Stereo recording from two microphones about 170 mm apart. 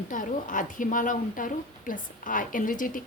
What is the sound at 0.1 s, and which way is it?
A woman's voice, 50° left (ahead or behind).